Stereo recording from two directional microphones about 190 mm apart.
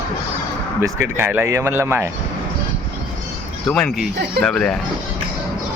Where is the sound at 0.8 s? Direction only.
10° right (ahead or behind).